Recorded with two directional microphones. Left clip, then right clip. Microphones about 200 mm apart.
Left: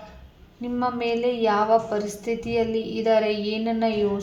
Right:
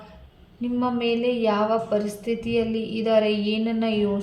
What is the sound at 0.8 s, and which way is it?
A woman's voice, 25° left (ahead or behind).